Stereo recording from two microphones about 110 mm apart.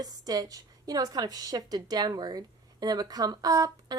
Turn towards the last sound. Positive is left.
turn(degrees=-35)  # may be behind; listen again after turning